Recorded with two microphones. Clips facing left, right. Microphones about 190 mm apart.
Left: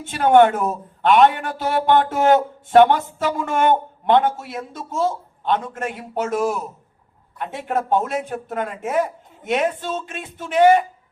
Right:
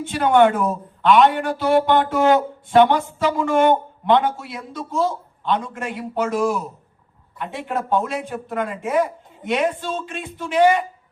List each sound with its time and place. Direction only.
0.1 s speech: 50° left (ahead or behind)